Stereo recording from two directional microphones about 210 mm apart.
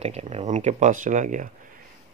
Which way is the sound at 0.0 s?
30° right (ahead or behind).